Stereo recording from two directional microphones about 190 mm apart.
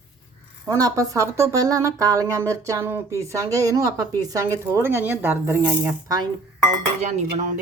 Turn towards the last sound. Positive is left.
turn(degrees=-40)  # may be behind; listen again after turning